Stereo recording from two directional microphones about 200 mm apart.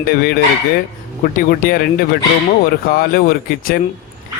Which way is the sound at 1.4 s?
45° left (ahead or behind).